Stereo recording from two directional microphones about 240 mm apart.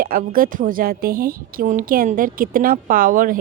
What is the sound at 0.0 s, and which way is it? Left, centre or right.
Speech, right.